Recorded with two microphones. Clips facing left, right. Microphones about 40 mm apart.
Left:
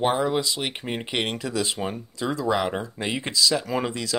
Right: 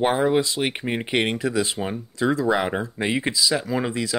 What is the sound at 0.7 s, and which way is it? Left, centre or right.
Speech, centre.